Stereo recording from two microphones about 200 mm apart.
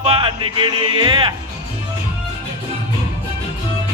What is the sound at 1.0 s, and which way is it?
Speech, 25° right (ahead or behind).